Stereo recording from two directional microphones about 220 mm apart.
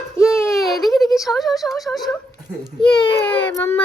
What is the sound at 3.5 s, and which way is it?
Speech, 10° left (ahead or behind).